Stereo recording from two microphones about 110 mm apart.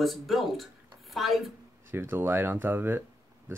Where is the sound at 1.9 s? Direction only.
20° right (ahead or behind).